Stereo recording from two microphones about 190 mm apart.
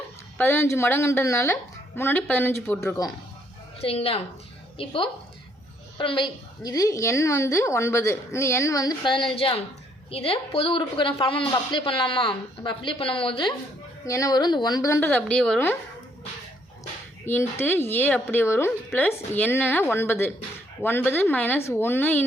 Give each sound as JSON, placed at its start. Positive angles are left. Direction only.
{"t": 0.3, "sound": "a woman's voice", "side_deg": 10}
{"t": 3.8, "sound": "a woman's voice", "side_deg": 30}
{"t": 17.2, "sound": "a woman's voice", "side_deg": 10}